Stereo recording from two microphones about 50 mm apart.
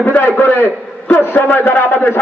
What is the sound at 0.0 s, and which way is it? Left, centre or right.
A man's voice, left.